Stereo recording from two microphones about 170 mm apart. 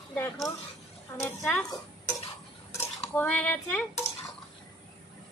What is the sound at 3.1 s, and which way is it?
Speech, 10° left (ahead or behind).